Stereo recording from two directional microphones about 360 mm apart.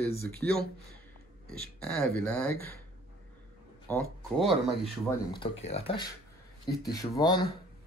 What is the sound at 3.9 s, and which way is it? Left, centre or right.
Speech, centre.